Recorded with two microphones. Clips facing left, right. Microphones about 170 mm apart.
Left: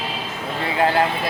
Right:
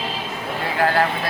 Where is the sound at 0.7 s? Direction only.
20° left (ahead or behind).